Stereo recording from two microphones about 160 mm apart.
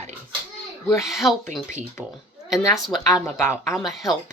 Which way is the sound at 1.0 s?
Centre (ahead or behind).